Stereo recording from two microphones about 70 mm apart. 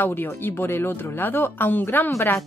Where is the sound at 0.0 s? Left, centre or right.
Left.